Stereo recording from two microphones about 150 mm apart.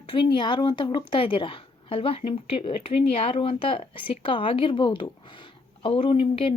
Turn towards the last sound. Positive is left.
turn(degrees=35)  # may be behind; listen again after turning